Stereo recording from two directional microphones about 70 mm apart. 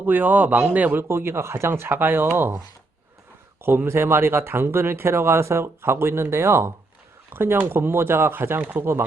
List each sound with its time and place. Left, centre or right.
0.0 s a man's voice: right
1.0 s speech: right
3.6 s speech: right